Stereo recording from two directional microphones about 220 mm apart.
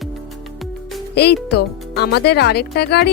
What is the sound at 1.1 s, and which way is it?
Speech, 50° left (ahead or behind).